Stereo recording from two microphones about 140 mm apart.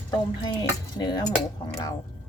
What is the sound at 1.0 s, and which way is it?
Speech, 30° left (ahead or behind).